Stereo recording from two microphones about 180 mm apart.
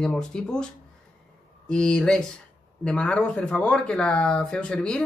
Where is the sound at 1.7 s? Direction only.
5° left (ahead or behind).